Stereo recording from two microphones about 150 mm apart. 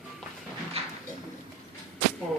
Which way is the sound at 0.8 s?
40° right (ahead or behind).